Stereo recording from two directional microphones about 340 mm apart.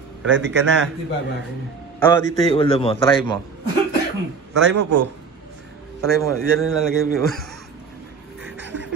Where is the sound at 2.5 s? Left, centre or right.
Centre.